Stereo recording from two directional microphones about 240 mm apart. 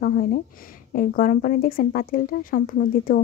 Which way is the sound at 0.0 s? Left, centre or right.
Left.